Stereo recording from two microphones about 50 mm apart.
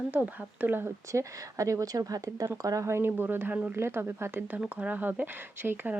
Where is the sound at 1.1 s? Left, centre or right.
Right.